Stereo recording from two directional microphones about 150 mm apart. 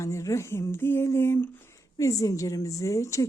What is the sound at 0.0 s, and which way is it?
A woman's voice, 20° left (ahead or behind).